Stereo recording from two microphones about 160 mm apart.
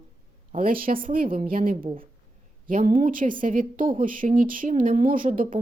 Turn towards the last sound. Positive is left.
turn(degrees=-55)  # may be behind; listen again after turning